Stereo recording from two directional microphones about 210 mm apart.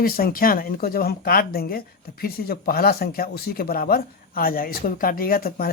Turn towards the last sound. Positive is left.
turn(degrees=45)  # may be behind; listen again after turning